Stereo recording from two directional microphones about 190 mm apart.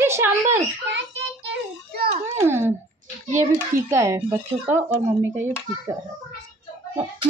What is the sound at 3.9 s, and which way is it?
Speech, 15° right (ahead or behind).